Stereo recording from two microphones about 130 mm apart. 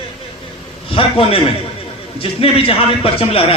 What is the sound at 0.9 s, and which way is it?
A man's voice, 45° left (ahead or behind).